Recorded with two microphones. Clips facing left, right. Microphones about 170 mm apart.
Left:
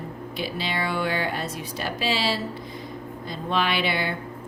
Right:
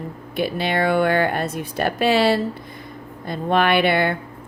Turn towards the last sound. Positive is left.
turn(degrees=-55)  # may be behind; listen again after turning